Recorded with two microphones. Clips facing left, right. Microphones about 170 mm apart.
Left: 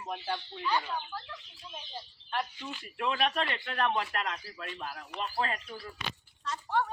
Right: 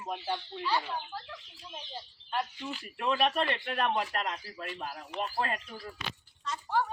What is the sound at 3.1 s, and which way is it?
Speech, 35° right (ahead or behind).